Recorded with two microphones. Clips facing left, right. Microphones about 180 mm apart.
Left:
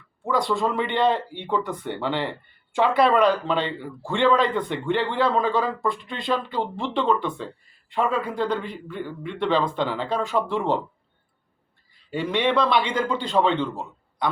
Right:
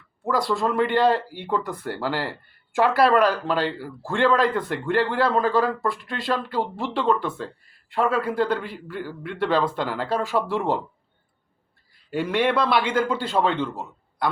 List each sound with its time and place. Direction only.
0.2 s speech: centre (ahead or behind)
12.1 s speech: 5° right (ahead or behind)